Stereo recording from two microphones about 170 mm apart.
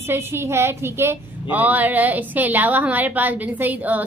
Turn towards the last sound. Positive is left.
turn(degrees=-10)  # may be behind; listen again after turning